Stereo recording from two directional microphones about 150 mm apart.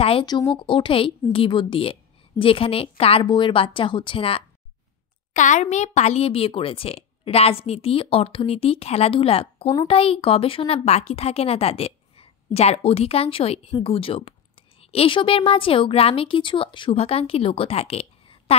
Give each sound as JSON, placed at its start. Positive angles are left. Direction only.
{"t": 0.0, "sound": "a woman's voice", "side_deg": 35}
{"t": 5.3, "sound": "a woman's voice", "side_deg": 55}